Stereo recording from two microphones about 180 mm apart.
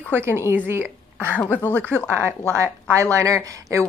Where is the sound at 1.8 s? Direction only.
15° right (ahead or behind).